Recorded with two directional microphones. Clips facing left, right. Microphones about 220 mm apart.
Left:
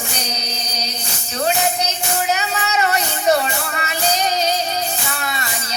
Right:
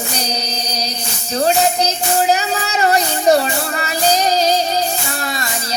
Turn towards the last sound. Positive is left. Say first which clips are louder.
# right 5 dB
turn(degrees=-35)  # may be behind; listen again after turning